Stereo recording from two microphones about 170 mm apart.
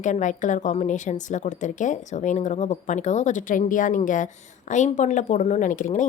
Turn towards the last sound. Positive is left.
turn(degrees=50)  # may be behind; listen again after turning